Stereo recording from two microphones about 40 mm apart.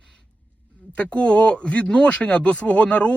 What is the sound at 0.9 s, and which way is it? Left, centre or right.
Speech, left.